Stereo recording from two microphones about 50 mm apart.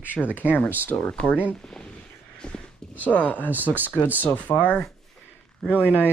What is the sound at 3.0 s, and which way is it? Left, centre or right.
Speech, left.